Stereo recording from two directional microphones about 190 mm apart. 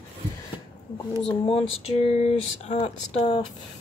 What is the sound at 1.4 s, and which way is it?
Speech, 30° left (ahead or behind).